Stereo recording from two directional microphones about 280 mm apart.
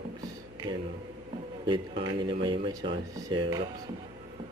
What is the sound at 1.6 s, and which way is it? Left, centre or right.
Speech, centre.